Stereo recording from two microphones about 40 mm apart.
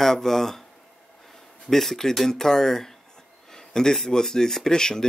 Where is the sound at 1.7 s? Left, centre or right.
Centre.